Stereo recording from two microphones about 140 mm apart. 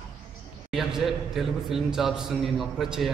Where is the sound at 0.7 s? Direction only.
Centre (ahead or behind).